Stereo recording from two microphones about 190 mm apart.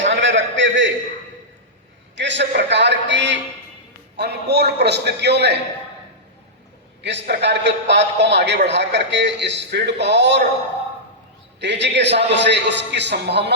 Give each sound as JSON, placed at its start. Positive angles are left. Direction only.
{"t": 0.0, "sound": "a sound", "side_deg": -70}
{"t": 2.1, "sound": "a man's voice", "side_deg": -70}
{"t": 7.0, "sound": "a man's voice", "side_deg": -65}
{"t": 11.6, "sound": "a man's voice", "side_deg": -65}